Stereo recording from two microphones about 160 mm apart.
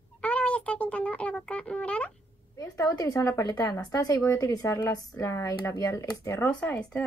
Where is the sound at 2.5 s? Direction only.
20° left (ahead or behind).